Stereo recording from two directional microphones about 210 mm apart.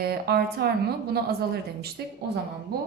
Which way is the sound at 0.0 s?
50° right (ahead or behind).